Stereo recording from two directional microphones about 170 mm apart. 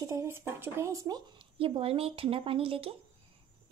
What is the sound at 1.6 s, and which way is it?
Speech, 35° right (ahead or behind).